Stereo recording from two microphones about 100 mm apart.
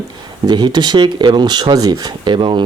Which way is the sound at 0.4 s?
45° right (ahead or behind).